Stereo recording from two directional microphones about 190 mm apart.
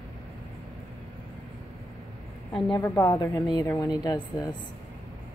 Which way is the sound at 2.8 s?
15° left (ahead or behind).